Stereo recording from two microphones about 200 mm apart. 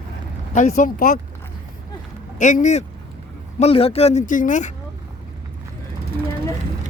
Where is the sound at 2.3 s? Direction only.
40° left (ahead or behind).